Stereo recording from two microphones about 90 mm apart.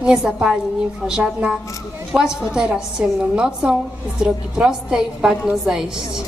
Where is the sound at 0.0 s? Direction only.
10° right (ahead or behind).